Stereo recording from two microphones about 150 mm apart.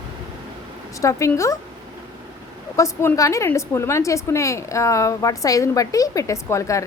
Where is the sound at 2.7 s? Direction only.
20° left (ahead or behind).